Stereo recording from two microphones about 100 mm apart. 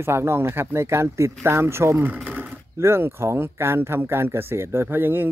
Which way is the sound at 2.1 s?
15° right (ahead or behind).